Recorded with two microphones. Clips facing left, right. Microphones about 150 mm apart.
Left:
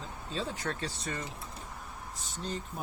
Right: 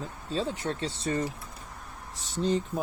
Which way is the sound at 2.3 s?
90° right.